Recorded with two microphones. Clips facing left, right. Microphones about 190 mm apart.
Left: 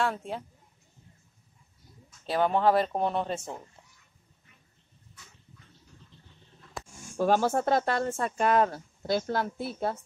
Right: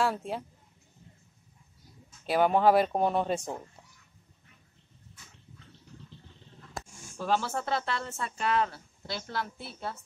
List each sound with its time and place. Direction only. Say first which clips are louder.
0.0 s speech: right 1 dB; 5° right (ahead or behind)
2.2 s speech: right 1 dB; 10° right (ahead or behind)
7.2 s speech: left 6 dB; 50° left (ahead or behind)